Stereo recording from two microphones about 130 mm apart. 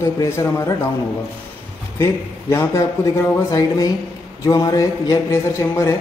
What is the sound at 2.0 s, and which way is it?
A man's voice, 20° left (ahead or behind).